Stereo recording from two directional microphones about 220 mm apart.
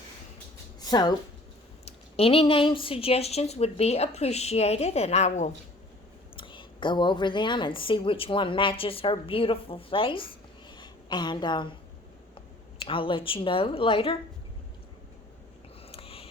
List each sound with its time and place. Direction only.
0.8 s speech: 20° left (ahead or behind)
2.1 s a woman's voice: 25° left (ahead or behind)
12.8 s a woman's voice: 25° left (ahead or behind)
15.9 s a sound: 25° left (ahead or behind)